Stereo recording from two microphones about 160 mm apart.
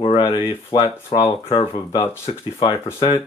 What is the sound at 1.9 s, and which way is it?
Speech, 35° left (ahead or behind).